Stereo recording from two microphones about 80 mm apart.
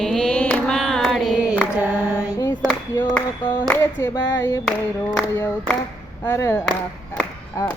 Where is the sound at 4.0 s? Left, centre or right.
Left.